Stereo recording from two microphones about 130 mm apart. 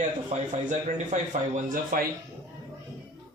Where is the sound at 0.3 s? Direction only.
70° right (ahead or behind); by 2.0 s 90° right.